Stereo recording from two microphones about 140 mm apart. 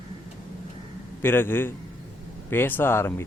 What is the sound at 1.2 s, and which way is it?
A man's voice, 15° left (ahead or behind).